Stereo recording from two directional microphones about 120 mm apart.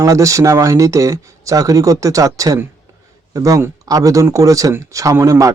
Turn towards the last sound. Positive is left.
turn(degrees=-25)  # may be behind; listen again after turning